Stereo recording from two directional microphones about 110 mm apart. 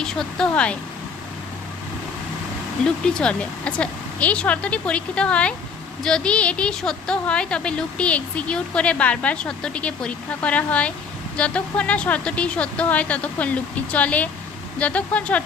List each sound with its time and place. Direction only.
0.0 s a woman's voice: 5° left (ahead or behind)
2.8 s a woman's voice: 10° left (ahead or behind)